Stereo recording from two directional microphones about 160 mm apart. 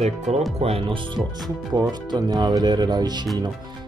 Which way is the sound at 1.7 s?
25° right (ahead or behind).